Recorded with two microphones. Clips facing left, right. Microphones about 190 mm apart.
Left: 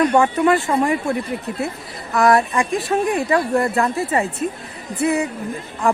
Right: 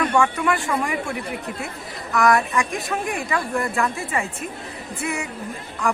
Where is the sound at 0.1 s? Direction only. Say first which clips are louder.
Left 5 dB; 35° left (ahead or behind).